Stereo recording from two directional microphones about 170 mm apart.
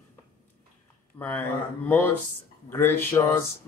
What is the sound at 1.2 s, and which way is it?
Speech, 10° left (ahead or behind).